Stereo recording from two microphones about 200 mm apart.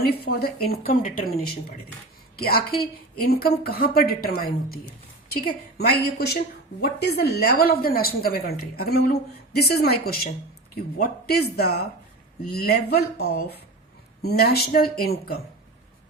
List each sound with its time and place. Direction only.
0.3 s a woman's voice: 50° left (ahead or behind)